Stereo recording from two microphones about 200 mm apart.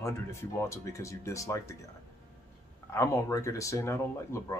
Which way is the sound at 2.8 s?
15° left (ahead or behind).